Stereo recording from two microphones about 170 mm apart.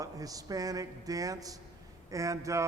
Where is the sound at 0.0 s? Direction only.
20° right (ahead or behind).